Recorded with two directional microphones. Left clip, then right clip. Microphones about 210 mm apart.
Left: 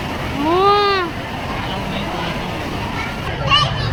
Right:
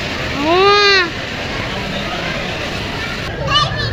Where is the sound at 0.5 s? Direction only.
5° left (ahead or behind).